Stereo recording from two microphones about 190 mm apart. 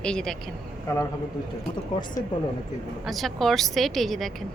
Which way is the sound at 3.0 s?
Centre (ahead or behind).